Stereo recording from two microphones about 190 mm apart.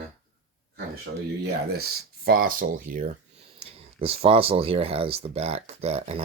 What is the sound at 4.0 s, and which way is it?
Speech, 30° right (ahead or behind).